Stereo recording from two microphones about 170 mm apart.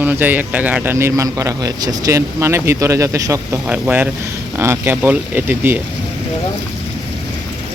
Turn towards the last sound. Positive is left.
turn(degrees=-10)  # may be behind; listen again after turning